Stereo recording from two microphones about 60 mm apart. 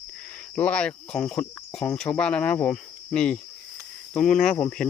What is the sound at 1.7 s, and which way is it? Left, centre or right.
Speech, centre.